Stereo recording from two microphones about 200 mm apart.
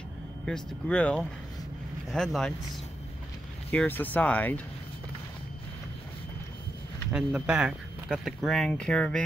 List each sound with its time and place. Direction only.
0.5 s speech: 5° left (ahead or behind)
3.7 s speech: 10° left (ahead or behind)
7.1 s speech: 5° right (ahead or behind)